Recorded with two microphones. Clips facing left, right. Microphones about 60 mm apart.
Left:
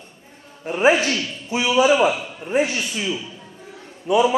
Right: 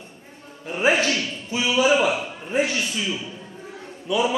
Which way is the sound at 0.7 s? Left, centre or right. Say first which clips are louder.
Left 3 dB; left.